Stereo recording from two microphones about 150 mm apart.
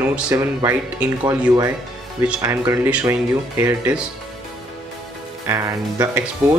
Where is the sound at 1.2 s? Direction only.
25° right (ahead or behind); by 4.0 s 10° right (ahead or behind).